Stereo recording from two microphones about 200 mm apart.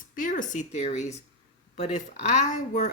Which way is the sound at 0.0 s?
40° left (ahead or behind).